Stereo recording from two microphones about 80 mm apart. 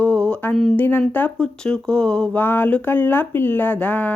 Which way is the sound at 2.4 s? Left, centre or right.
Left.